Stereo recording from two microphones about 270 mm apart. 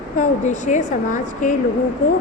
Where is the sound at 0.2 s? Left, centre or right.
Left.